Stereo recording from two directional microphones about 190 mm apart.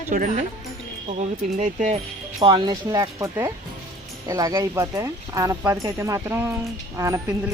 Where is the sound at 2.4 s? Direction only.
25° right (ahead or behind).